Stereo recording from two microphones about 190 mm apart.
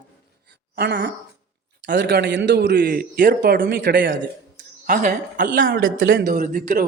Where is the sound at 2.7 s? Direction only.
55° right (ahead or behind).